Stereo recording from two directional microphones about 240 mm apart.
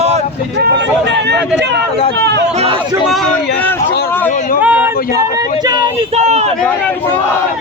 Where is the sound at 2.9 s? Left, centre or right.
Centre.